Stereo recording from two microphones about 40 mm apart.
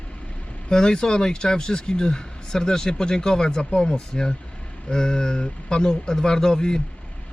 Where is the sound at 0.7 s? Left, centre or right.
Centre.